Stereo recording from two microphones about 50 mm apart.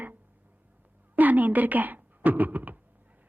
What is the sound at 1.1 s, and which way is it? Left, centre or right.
A woman's voice, right.